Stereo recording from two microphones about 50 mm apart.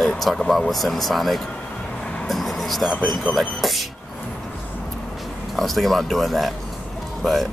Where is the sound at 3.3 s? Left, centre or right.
Centre.